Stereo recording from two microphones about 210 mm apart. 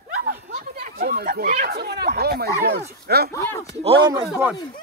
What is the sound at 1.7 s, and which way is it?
Speech, 50° right (ahead or behind).